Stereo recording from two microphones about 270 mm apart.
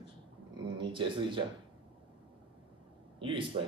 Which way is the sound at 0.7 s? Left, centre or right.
Centre.